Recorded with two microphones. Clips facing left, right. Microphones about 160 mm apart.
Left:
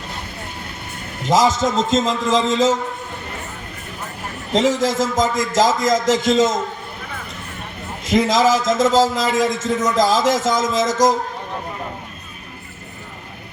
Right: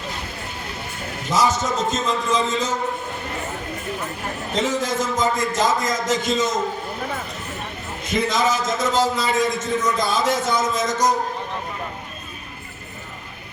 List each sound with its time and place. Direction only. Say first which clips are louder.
1.3 s a man's voice: left 4 dB; 90° left
4.5 s a man's voice: left 6 dB; 90° left
8.1 s a man's voice: left 6 dB; 90° left